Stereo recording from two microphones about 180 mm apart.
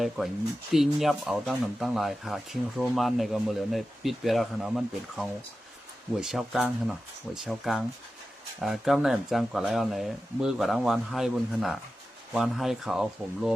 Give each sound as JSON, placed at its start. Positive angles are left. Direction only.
{"t": 0.7, "sound": "speech", "side_deg": 0}